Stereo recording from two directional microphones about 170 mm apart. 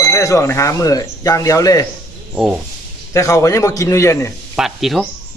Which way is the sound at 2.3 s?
10° right (ahead or behind).